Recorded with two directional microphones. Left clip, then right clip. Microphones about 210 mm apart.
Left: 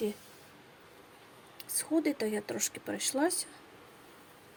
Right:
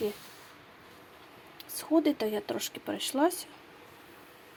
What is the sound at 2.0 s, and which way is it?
Speech, 20° right (ahead or behind).